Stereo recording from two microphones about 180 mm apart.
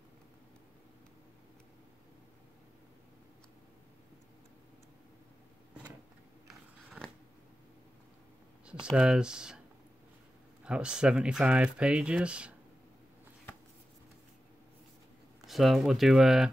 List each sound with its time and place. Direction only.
8.6 s speech: 5° right (ahead or behind)
10.6 s speech: 5° right (ahead or behind)
15.4 s speech: centre (ahead or behind)